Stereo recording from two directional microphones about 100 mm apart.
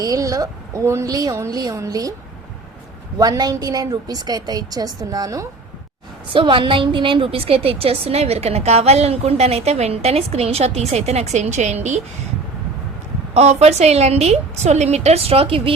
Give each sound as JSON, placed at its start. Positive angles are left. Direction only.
{"t": 0.0, "sound": "a woman's voice", "side_deg": -35}
{"t": 3.2, "sound": "a woman's voice", "side_deg": -40}
{"t": 6.3, "sound": "a woman's voice", "side_deg": -60}
{"t": 13.3, "sound": "a woman's voice", "side_deg": -90}